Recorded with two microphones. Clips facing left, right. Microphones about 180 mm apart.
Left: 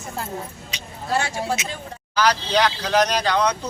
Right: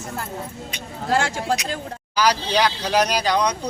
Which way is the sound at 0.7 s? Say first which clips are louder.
Right 3 dB; 55° right (ahead or behind).